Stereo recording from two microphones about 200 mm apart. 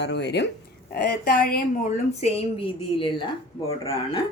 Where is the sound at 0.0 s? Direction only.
60° left (ahead or behind).